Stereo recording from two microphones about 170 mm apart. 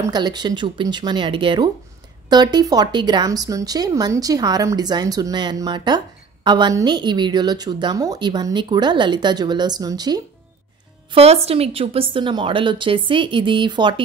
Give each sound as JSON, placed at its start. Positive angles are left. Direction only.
{"t": 0.0, "sound": "speech", "side_deg": -25}
{"t": 11.1, "sound": "speech", "side_deg": -35}